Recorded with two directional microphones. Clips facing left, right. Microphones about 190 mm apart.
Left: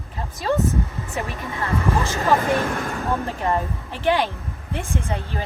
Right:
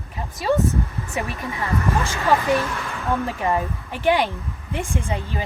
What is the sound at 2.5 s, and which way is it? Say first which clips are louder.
Speech: even; 55° left (ahead or behind).